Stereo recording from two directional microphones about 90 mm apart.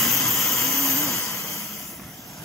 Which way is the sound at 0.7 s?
35° left (ahead or behind).